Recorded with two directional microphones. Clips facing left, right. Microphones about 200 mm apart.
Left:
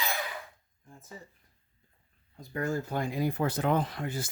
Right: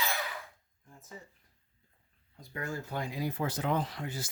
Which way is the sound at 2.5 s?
45° left (ahead or behind).